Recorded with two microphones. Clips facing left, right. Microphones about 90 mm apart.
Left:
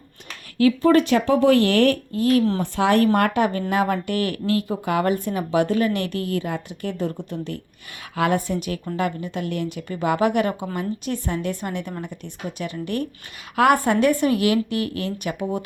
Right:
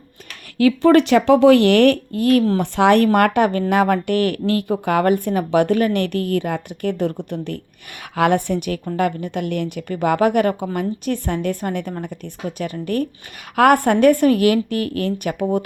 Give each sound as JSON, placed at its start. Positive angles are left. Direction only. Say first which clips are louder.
{"t": 0.6, "sound": "speech", "louder": "right 3 dB", "side_deg": -85}
{"t": 2.6, "sound": "speech", "louder": "right 4 dB", "side_deg": -75}
{"t": 8.1, "sound": "a woman's voice", "louder": "right 4 dB", "side_deg": -75}
{"t": 13.6, "sound": "speech", "louder": "right 4 dB", "side_deg": -60}